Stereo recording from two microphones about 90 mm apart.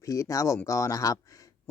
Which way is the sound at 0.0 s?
40° left (ahead or behind).